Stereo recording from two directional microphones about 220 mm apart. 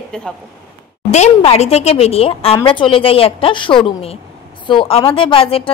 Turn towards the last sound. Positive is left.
turn(degrees=25)  # may be behind; listen again after turning